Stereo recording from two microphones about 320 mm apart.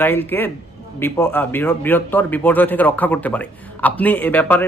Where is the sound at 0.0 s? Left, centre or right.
Centre.